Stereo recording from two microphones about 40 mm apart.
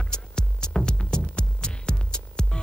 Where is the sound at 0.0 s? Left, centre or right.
Centre.